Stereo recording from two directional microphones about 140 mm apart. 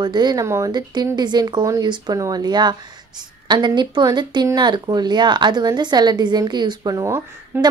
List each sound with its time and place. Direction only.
0.0 s a woman's voice: 30° right (ahead or behind)